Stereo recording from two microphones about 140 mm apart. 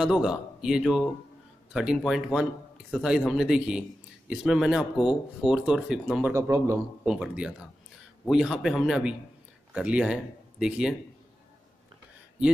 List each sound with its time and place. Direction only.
0.0 s speech: 5° right (ahead or behind)
6.3 s a man's voice: 20° right (ahead or behind)
7.1 s speech: 5° right (ahead or behind)